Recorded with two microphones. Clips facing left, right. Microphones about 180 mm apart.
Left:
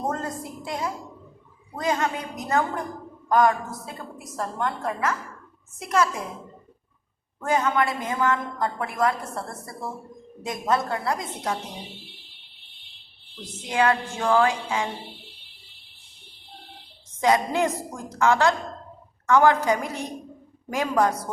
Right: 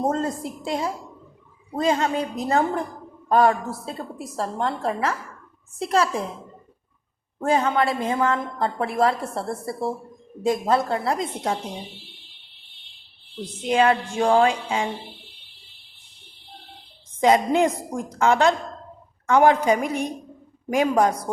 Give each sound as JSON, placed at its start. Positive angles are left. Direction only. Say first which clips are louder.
{"t": 0.1, "sound": "a woman's voice", "louder": "right 5 dB", "side_deg": -25}
{"t": 7.3, "sound": "a woman's voice", "louder": "right 2 dB", "side_deg": -30}
{"t": 13.7, "sound": "a woman's voice", "louder": "right 3 dB", "side_deg": -25}
{"t": 17.2, "sound": "a woman's voice", "louder": "right 4 dB", "side_deg": -20}